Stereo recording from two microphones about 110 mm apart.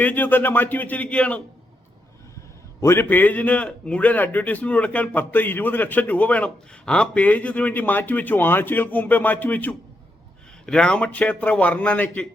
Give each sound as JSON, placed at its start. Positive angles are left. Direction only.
{"t": 0.0, "sound": "a man's voice", "side_deg": 15}
{"t": 2.8, "sound": "a man's voice", "side_deg": 20}